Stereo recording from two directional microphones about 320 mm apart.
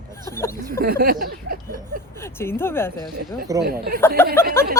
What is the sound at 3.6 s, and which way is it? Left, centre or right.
Speech, right.